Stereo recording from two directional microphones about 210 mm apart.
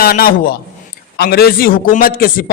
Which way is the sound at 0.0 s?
45° left (ahead or behind).